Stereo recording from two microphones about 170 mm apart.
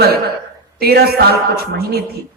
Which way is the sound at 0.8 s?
65° right (ahead or behind).